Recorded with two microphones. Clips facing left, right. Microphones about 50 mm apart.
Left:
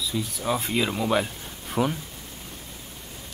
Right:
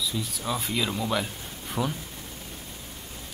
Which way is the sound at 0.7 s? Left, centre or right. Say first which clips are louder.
Left 3 dB; centre.